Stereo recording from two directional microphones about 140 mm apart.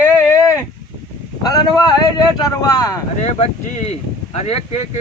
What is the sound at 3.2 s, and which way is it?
Speech, 50° left (ahead or behind).